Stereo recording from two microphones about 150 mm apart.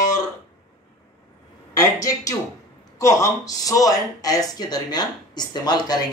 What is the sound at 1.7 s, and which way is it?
Speech, 20° left (ahead or behind).